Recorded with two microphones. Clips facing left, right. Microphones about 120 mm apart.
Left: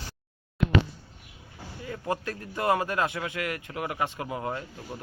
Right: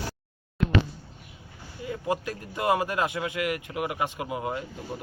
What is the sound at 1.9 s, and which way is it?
Speech, 15° right (ahead or behind).